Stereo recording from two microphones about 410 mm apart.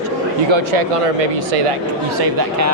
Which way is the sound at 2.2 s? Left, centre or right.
Right.